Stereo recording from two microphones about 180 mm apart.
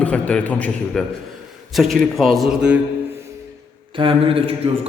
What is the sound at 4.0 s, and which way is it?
Speech, 30° right (ahead or behind).